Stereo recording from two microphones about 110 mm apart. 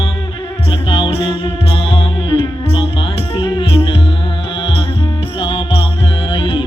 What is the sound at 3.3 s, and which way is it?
Music, 50° left (ahead or behind).